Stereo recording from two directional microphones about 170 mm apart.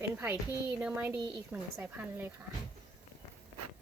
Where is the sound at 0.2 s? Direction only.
10° right (ahead or behind).